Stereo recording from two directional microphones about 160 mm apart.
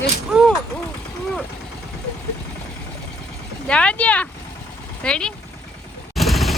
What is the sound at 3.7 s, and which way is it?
Speech, 5° left (ahead or behind).